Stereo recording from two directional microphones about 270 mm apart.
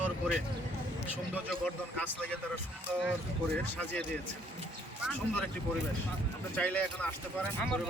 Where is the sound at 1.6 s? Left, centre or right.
Centre.